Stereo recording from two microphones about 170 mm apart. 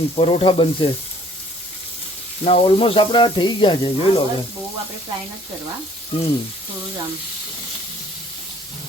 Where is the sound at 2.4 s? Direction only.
35° left (ahead or behind).